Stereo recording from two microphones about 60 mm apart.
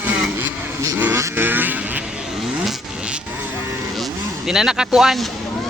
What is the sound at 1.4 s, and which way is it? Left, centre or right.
Vehicle, right.